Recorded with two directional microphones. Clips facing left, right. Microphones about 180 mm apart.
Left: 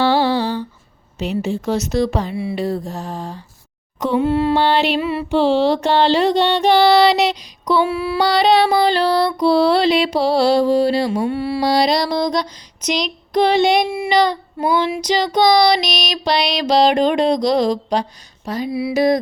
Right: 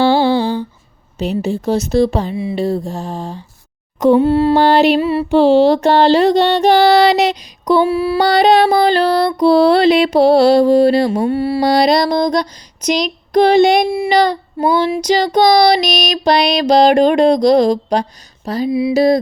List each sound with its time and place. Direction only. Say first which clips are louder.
0.0 s humming: right 4 dB; 30° right (ahead or behind)
1.2 s speech: right 3 dB; 35° right (ahead or behind)
2.3 s mantra: right 4 dB; 15° right (ahead or behind)
4.0 s mantra: right 6 dB; 40° right (ahead or behind)
18.4 s speech: right 5 dB; 35° right (ahead or behind)
18.7 s mantra: right 4 dB; 20° right (ahead or behind)